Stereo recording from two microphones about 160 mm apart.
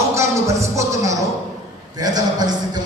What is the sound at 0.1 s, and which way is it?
Music, 20° right (ahead or behind).